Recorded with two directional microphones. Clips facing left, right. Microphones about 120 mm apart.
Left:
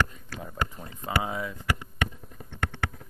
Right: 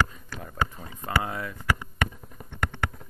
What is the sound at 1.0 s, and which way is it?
Speech, 10° left (ahead or behind).